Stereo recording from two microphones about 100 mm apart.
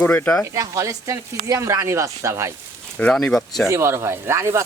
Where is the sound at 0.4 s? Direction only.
35° right (ahead or behind).